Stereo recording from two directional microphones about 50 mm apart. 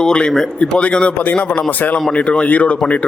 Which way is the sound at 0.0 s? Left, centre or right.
Centre.